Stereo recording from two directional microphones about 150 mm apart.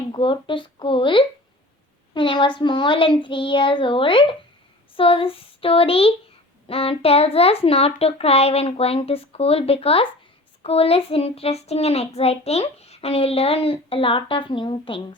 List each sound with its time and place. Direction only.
0.1 s a child's voice: 35° left (ahead or behind)